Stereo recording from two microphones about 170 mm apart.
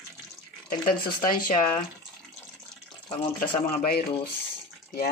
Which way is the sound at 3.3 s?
60° left (ahead or behind).